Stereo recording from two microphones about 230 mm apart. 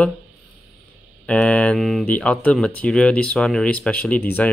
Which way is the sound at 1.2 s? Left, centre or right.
Centre.